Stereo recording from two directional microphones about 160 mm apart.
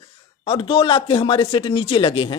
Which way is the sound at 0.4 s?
35° left (ahead or behind).